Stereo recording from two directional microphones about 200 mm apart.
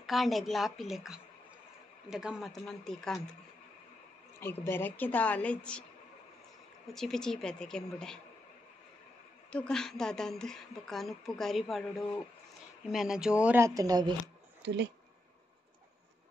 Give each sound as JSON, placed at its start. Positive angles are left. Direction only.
{"t": 0.0, "sound": "a woman's voice", "side_deg": 0}
{"t": 4.4, "sound": "a woman's voice", "side_deg": 10}
{"t": 6.9, "sound": "a woman's voice", "side_deg": 0}
{"t": 9.5, "sound": "a woman's voice", "side_deg": 5}
{"t": 12.9, "sound": "speech", "side_deg": 0}
{"t": 14.6, "sound": "speech", "side_deg": -60}